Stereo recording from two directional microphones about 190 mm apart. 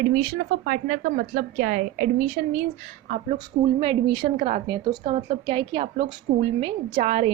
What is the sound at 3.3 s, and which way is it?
A woman's voice, 25° right (ahead or behind).